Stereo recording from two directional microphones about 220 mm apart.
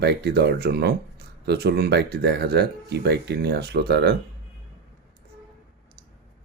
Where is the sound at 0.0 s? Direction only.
50° right (ahead or behind).